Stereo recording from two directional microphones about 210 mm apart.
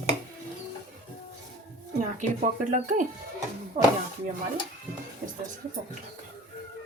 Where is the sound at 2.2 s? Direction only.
35° right (ahead or behind).